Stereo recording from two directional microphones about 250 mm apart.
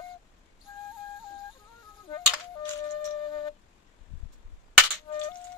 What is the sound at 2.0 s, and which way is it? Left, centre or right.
Music, centre.